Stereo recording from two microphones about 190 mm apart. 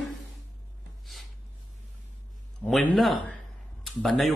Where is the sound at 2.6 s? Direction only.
5° left (ahead or behind).